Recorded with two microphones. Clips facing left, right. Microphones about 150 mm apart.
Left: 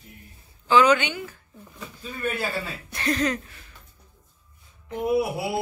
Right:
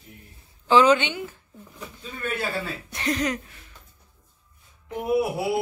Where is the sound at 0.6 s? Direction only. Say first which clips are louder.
Right 1 dB; 30° right (ahead or behind).